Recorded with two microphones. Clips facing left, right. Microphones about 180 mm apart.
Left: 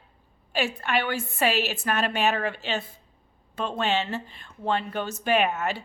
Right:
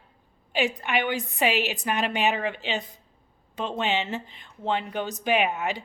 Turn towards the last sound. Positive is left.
turn(degrees=-15)  # may be behind; listen again after turning